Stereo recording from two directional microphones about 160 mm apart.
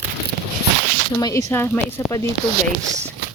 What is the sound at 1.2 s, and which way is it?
Speech, 20° left (ahead or behind).